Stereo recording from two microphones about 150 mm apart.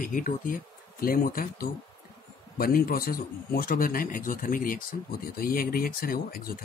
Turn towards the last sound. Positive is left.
turn(degrees=80)